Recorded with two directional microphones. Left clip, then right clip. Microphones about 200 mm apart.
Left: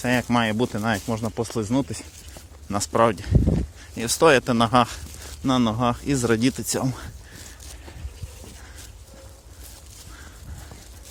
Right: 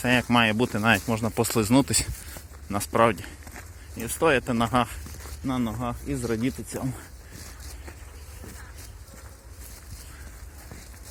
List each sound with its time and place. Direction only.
0.0 s speech: 10° left (ahead or behind); by 2.0 s 10° right (ahead or behind)
2.6 s speech: 15° left (ahead or behind)
3.9 s speech: 30° left (ahead or behind)
5.5 s speech: 45° left (ahead or behind); by 7.4 s 30° left (ahead or behind)